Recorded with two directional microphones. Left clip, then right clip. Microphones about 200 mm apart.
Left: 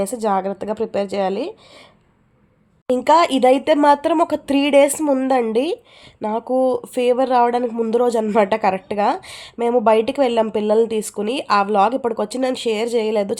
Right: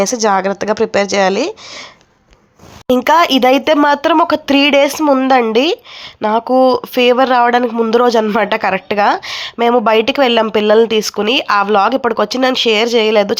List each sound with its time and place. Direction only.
0.0 s a woman's voice: 15° right (ahead or behind)
2.8 s speech: 15° right (ahead or behind)